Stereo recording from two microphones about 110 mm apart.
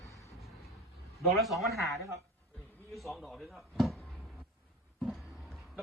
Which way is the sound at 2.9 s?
Centre (ahead or behind).